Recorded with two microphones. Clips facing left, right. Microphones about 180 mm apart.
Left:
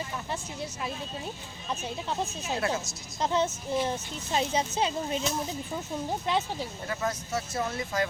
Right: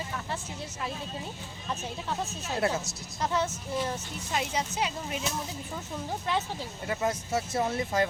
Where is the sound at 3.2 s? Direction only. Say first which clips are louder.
Left 2 dB; 20° left (ahead or behind).